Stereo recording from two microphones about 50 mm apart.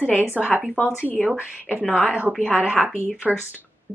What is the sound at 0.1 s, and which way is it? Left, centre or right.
Speech, right.